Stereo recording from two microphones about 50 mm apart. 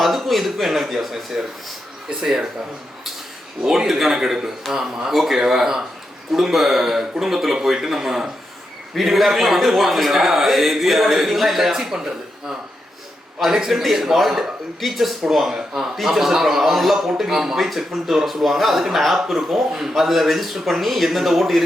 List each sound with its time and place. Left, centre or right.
0.0 s a man's voice: centre
2.2 s speech: centre
3.6 s a man's voice: centre
13.4 s a man's voice: centre